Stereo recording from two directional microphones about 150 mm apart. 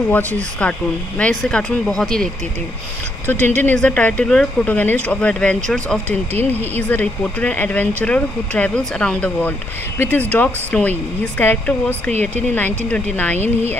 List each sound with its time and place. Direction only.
0.1 s speech: 10° left (ahead or behind)
3.4 s speech: 10° left (ahead or behind)
12.1 s speech: 50° right (ahead or behind)
12.5 s speech: 10° left (ahead or behind)
13.4 s speech: 45° right (ahead or behind)